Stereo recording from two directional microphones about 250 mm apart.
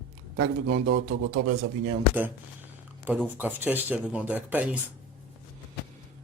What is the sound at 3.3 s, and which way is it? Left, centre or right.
Speech, centre.